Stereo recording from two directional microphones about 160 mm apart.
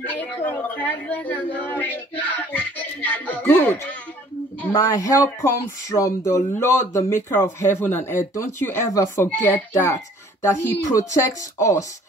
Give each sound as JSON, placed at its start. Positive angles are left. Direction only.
{"t": 0.0, "sound": "a woman's voice", "side_deg": 10}